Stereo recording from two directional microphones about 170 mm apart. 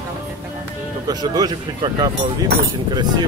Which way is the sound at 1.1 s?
25° right (ahead or behind).